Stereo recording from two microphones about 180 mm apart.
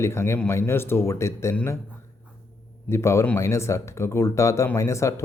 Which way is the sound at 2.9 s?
15° left (ahead or behind).